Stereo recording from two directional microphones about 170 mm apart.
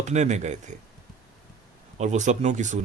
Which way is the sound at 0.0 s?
45° right (ahead or behind).